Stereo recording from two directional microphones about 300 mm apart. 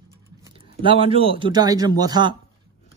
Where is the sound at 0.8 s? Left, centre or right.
Centre.